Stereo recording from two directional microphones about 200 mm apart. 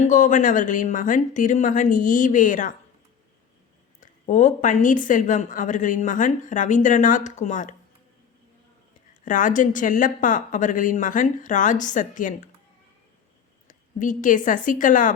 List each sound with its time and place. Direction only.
0.0 s a woman's voice: 40° left (ahead or behind)
4.0 s a woman's voice: 40° left (ahead or behind)
9.2 s a woman's voice: 40° left (ahead or behind)
13.7 s a woman's voice: 40° left (ahead or behind)